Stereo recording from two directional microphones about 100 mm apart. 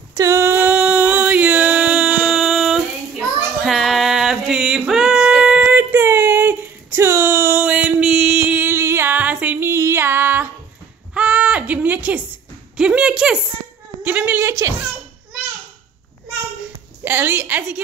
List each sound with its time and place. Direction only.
0.1 s a sound: 30° right (ahead or behind); by 2.3 s 10° right (ahead or behind)
2.3 s child singing: centre (ahead or behind); by 7.6 s 25° right (ahead or behind)
7.6 s a sound: 10° right (ahead or behind)
12.7 s a woman's voice: 10° right (ahead or behind)
14.0 s a woman's voice: 20° right (ahead or behind)
17.0 s a woman's voice: 20° right (ahead or behind)